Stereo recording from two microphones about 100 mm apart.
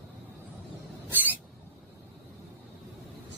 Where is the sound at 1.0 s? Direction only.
20° right (ahead or behind).